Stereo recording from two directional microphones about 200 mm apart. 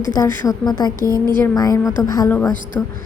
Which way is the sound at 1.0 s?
20° right (ahead or behind).